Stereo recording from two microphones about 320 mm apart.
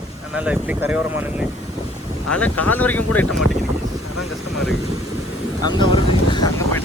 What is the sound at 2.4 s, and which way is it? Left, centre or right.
Speech, centre.